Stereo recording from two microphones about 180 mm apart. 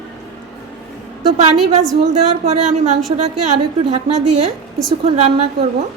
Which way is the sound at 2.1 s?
40° right (ahead or behind).